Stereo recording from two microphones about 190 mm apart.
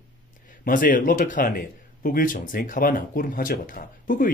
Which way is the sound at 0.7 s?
45° left (ahead or behind).